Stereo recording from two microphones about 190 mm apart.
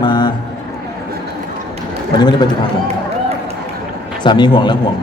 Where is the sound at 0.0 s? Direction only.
25° left (ahead or behind).